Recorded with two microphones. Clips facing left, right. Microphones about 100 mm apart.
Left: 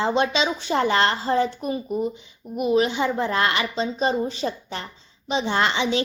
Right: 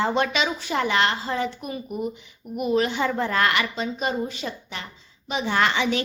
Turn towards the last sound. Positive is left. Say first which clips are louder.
# even
turn(degrees=20)  # may be behind; listen again after turning